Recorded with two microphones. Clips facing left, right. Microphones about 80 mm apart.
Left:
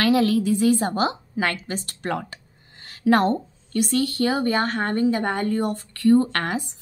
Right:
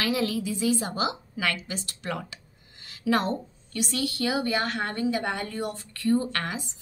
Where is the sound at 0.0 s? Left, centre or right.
Left.